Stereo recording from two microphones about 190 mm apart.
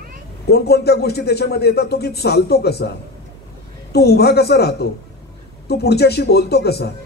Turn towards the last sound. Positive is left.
turn(degrees=60)  # may be behind; listen again after turning